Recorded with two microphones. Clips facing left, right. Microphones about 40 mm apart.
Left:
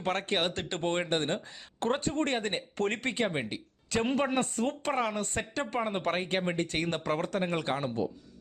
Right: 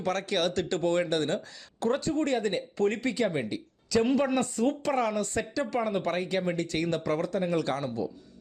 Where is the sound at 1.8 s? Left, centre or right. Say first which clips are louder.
Right 2 dB; left.